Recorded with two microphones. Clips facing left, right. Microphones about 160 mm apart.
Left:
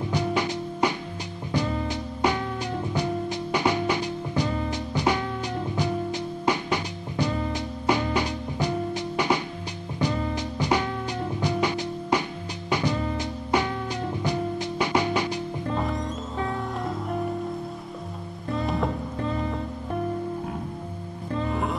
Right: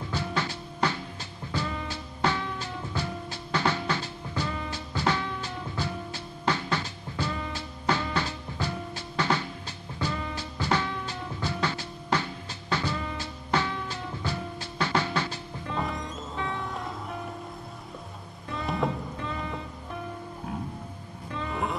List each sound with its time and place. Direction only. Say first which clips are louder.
0.1 s music: left 5 dB; 15° left (ahead or behind)
12.9 s music: left 6 dB; 35° left (ahead or behind)
13.2 s music: left 4 dB; 15° left (ahead or behind)
16.0 s music: left 5 dB; 40° left (ahead or behind)
18.6 s music: left 2 dB; centre (ahead or behind)
19.2 s music: left 8 dB; 35° left (ahead or behind)
21.3 s music: left 6 dB; 40° left (ahead or behind)